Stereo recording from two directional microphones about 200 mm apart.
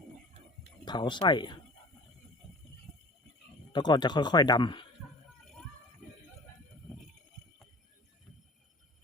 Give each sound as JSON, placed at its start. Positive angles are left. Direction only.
{"t": 0.9, "sound": "speech", "side_deg": 20}
{"t": 3.7, "sound": "speech", "side_deg": 20}